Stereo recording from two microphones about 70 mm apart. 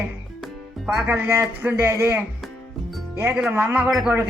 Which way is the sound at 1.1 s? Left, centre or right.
Right.